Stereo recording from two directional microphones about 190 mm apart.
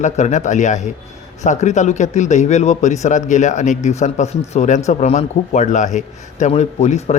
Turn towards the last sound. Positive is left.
turn(degrees=35)  # may be behind; listen again after turning